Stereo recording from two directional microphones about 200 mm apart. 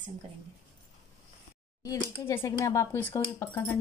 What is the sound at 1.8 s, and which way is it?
Speech, 15° left (ahead or behind).